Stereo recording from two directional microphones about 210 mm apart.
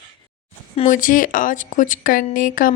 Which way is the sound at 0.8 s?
40° left (ahead or behind).